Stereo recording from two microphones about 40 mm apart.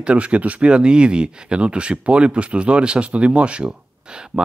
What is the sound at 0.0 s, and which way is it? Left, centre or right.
Speech, right.